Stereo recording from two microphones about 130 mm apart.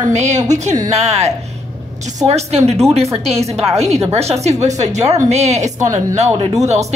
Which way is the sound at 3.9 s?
55° right (ahead or behind).